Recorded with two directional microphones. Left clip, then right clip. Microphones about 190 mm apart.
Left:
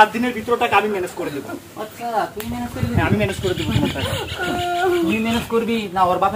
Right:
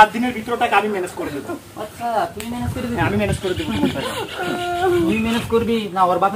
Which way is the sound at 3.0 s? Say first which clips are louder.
Even; 15° right (ahead or behind).